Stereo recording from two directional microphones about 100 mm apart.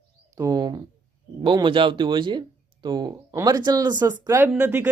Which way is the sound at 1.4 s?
55° right (ahead or behind).